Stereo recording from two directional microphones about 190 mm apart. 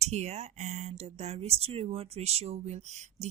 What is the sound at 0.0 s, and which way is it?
Speech, 35° right (ahead or behind).